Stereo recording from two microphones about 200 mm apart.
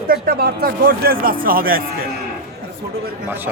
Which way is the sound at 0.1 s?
50° right (ahead or behind).